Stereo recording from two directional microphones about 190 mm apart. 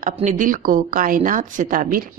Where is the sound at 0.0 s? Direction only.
40° right (ahead or behind).